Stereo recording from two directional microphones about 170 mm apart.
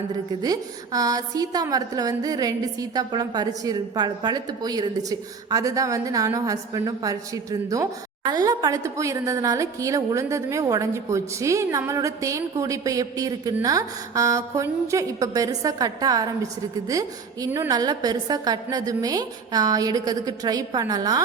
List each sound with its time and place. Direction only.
0.4 s a woman's voice: 20° right (ahead or behind)